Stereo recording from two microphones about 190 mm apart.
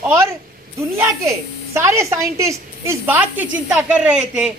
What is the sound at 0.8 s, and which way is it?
A man's voice, 15° right (ahead or behind).